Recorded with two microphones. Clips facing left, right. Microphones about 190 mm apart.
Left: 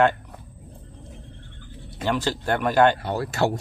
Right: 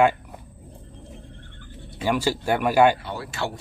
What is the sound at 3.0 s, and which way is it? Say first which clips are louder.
Speech: left 6 dB; 45° left (ahead or behind).